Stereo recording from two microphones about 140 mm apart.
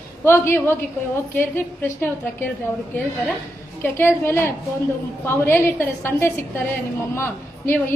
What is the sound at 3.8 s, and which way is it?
A woman's voice, 15° left (ahead or behind).